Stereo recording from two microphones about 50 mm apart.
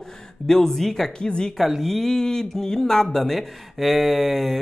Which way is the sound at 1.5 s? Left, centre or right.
Centre.